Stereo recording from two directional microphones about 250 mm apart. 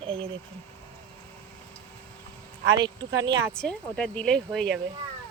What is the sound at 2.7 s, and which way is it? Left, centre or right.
Speech, centre.